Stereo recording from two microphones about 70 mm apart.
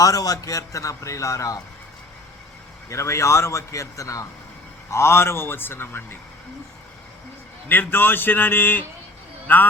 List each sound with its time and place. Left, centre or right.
0.0 s a man's voice: left
2.9 s a man's voice: left
4.9 s speech: left
7.7 s a man's voice: left